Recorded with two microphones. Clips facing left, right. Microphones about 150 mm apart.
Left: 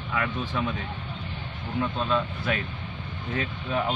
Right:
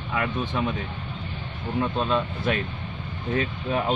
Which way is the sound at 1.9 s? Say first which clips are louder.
Right 2 dB; 40° right (ahead or behind).